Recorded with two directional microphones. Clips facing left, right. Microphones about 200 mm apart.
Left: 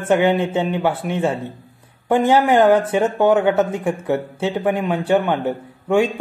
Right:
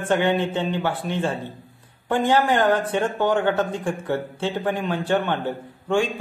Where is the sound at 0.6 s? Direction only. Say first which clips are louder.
Left 4 dB; 20° left (ahead or behind).